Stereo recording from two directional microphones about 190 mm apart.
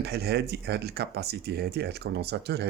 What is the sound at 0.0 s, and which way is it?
Speech, 60° right (ahead or behind).